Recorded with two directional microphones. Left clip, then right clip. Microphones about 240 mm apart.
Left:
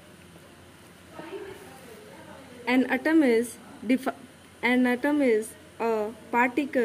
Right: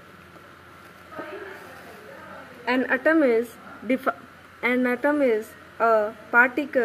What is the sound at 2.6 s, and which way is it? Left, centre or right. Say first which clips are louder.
A woman's voice: right 3 dB; centre.